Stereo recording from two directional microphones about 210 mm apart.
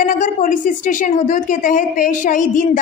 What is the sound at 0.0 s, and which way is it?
A woman's voice, 40° left (ahead or behind).